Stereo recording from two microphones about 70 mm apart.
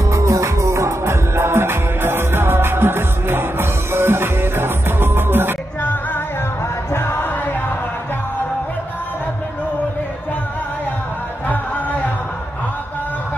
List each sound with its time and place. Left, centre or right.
0.1 s music: right
6.9 s music: left